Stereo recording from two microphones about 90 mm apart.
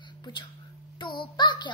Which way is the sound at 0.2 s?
55° left (ahead or behind).